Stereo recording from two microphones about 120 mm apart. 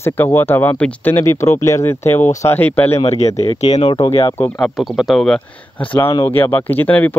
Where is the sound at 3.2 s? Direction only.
65° left (ahead or behind).